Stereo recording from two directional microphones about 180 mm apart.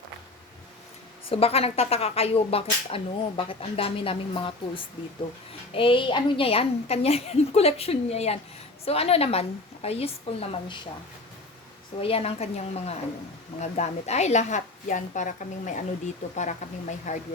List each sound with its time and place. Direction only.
1.3 s speech: 35° left (ahead or behind)
11.9 s a woman's voice: 30° left (ahead or behind)